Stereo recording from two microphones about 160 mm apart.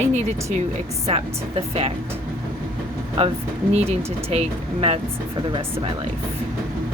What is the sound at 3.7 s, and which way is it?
Speech, 40° right (ahead or behind).